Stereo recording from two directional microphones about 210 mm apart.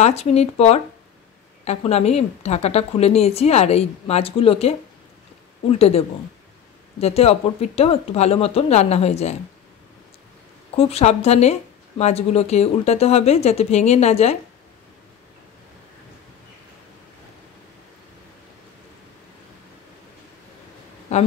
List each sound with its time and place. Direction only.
0.0 s a woman's voice: 30° left (ahead or behind)
10.8 s a woman's voice: 30° left (ahead or behind)